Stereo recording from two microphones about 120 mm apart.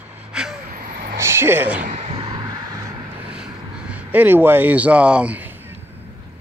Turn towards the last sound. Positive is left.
turn(degrees=-10)  # may be behind; listen again after turning